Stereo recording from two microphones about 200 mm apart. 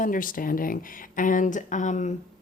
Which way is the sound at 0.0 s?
40° left (ahead or behind).